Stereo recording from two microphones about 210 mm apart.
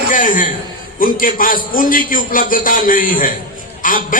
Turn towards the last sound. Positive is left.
turn(degrees=40)  # may be behind; listen again after turning